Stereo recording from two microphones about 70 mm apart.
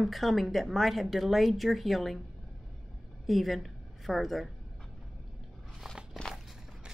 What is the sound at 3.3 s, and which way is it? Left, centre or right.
A woman's voice, centre.